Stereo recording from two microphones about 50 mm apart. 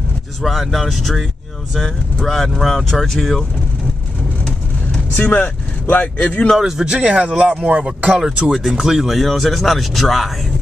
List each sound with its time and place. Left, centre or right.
0.4 s speech: centre
5.1 s speech: left
6.6 s speech: centre
8.3 s speech: centre